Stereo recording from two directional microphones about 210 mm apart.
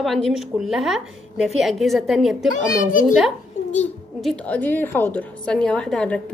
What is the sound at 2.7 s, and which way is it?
Speech, 40° left (ahead or behind).